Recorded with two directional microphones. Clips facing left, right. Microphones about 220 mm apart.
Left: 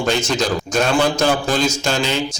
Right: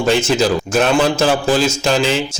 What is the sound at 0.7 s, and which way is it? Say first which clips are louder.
Speech: right 1 dB; 5° right (ahead or behind).